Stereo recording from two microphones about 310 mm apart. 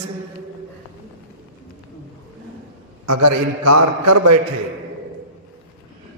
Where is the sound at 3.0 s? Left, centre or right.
Right.